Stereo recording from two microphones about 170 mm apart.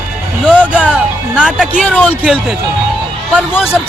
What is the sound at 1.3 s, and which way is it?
Speech, 5° right (ahead or behind).